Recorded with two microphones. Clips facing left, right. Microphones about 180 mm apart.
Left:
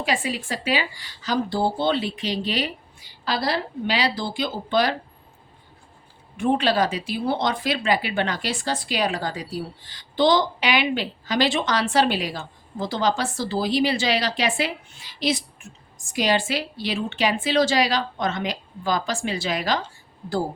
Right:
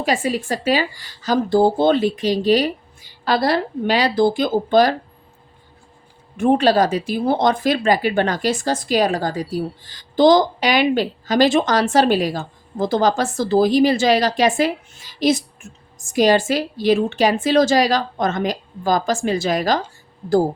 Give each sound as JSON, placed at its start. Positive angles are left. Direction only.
{"t": 0.0, "sound": "speech", "side_deg": -45}
{"t": 6.3, "sound": "speech", "side_deg": -45}